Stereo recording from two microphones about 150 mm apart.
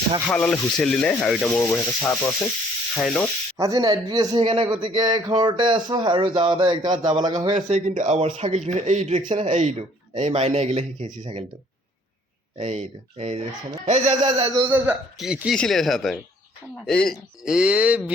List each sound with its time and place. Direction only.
0.3 s speech: 10° left (ahead or behind)
1.5 s sanding: 15° left (ahead or behind)
3.0 s speech: centre (ahead or behind)
3.6 s speech: 25° right (ahead or behind)
4.4 s speech: 35° right (ahead or behind)
7.5 s speech: 55° right (ahead or behind)
12.5 s speech: 45° right (ahead or behind)
14.3 s speech: 35° right (ahead or behind)
14.6 s speech: 15° right (ahead or behind); by 17.2 s 5° left (ahead or behind)
17.4 s speech: 5° right (ahead or behind)